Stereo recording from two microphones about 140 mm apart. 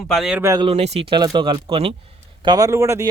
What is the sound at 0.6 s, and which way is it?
Speech, 45° right (ahead or behind).